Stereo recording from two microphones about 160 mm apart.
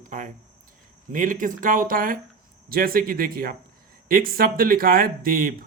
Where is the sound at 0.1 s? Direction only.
55° right (ahead or behind).